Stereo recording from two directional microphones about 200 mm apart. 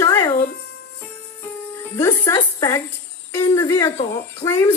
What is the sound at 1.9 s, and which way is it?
A woman's voice, 15° left (ahead or behind).